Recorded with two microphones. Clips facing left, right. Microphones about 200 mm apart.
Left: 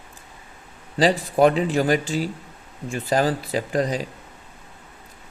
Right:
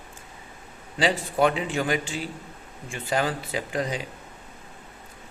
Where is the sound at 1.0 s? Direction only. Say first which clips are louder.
Left 5 dB; 35° left (ahead or behind).